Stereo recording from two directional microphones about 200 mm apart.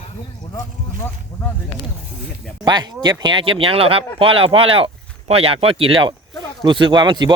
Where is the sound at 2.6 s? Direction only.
20° right (ahead or behind).